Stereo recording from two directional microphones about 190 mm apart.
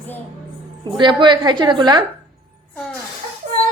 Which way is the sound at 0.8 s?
25° right (ahead or behind).